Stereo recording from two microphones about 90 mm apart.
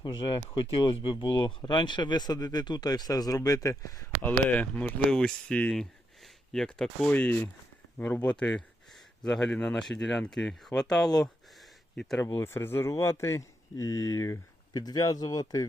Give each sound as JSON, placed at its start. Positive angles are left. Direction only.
{"t": 0.0, "sound": "speech", "side_deg": 55}
{"t": 4.2, "sound": "speech", "side_deg": 20}
{"t": 7.1, "sound": "speech", "side_deg": 20}
{"t": 12.4, "sound": "speech", "side_deg": 30}